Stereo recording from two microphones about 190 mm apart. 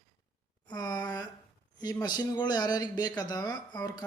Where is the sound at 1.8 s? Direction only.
20° left (ahead or behind).